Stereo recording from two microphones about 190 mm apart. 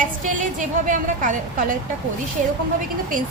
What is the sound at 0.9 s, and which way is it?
Speech, 45° right (ahead or behind).